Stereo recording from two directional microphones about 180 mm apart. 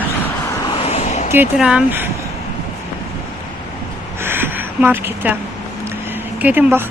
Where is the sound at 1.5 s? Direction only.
5° right (ahead or behind).